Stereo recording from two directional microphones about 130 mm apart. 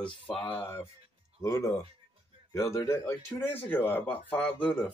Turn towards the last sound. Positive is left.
turn(degrees=10)  # may be behind; listen again after turning